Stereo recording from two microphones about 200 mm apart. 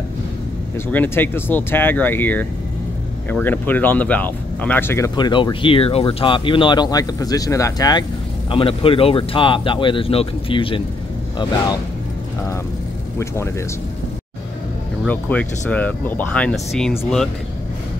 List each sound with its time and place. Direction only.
0.9 s speech: 10° left (ahead or behind); by 10.8 s 25° left (ahead or behind)
15.0 s speech: 5° left (ahead or behind)